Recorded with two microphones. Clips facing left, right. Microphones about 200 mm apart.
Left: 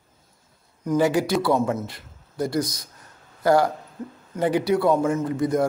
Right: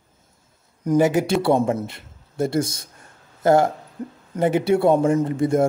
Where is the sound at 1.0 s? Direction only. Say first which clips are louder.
Right 2 dB; 20° right (ahead or behind).